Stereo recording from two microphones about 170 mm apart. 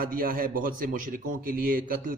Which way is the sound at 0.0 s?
55° right (ahead or behind).